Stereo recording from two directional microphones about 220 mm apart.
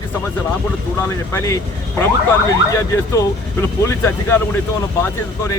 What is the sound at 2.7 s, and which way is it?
Speech, 15° left (ahead or behind).